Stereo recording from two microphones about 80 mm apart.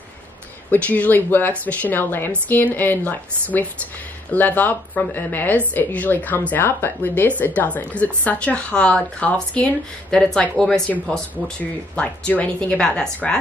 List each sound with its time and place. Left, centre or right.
0.7 s speech: centre